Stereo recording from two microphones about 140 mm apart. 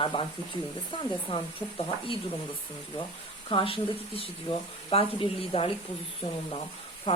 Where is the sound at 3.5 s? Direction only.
40° left (ahead or behind).